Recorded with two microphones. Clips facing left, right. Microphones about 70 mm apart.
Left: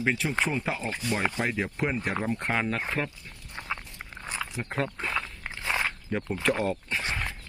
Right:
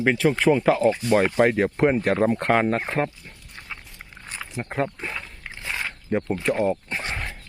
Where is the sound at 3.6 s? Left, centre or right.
Left.